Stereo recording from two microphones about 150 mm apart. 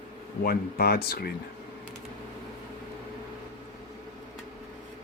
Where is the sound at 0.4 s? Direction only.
90° left.